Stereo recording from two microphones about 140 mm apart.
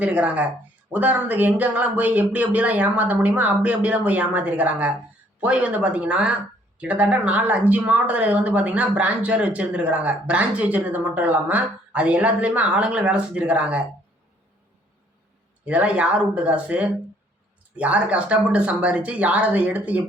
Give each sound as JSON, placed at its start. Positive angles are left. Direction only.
{"t": 0.0, "sound": "speech", "side_deg": -10}
{"t": 15.6, "sound": "speech", "side_deg": -10}